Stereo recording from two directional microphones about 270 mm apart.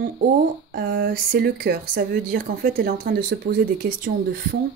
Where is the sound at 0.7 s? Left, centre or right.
Right.